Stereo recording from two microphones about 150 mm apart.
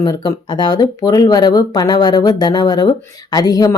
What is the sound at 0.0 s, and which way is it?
Speech, 25° left (ahead or behind).